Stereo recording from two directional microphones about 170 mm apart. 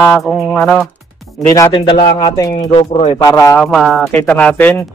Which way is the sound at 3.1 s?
15° left (ahead or behind).